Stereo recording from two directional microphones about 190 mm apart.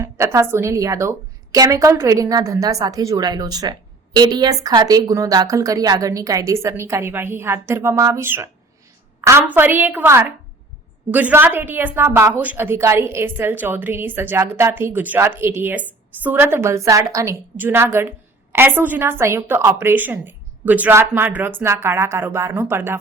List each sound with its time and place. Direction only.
0.0 s a woman's voice: 15° right (ahead or behind)